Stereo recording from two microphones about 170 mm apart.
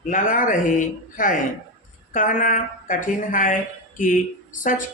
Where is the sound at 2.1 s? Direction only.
50° left (ahead or behind).